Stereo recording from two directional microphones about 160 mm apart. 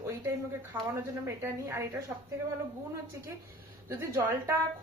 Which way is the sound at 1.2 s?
15° right (ahead or behind).